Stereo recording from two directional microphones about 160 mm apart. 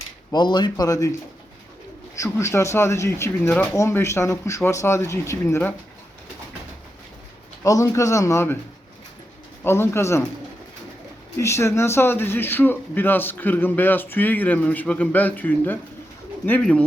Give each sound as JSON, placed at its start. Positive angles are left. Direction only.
{"t": 0.3, "sound": "speech", "side_deg": 30}
{"t": 2.1, "sound": "a man's voice", "side_deg": 20}
{"t": 7.6, "sound": "speech", "side_deg": 20}
{"t": 9.6, "sound": "a man's voice", "side_deg": 15}
{"t": 11.3, "sound": "a man's voice", "side_deg": 20}